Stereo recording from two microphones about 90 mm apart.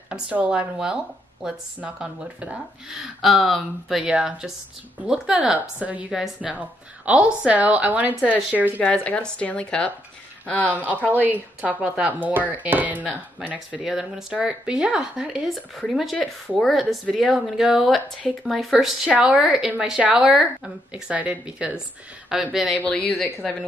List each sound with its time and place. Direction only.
0.1 s speech: 15° right (ahead or behind)
4.0 s speech: 15° right (ahead or behind)
6.5 s speech: 15° right (ahead or behind)
8.7 s a woman's voice: 15° left (ahead or behind)
10.9 s speech: 20° right (ahead or behind); by 16.2 s centre (ahead or behind)
16.2 s a woman's voice: 15° left (ahead or behind)
16.6 s speech: centre (ahead or behind)
22.8 s a woman's voice: 15° left (ahead or behind)